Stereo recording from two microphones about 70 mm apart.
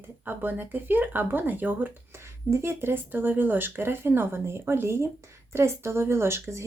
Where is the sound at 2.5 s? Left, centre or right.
Right.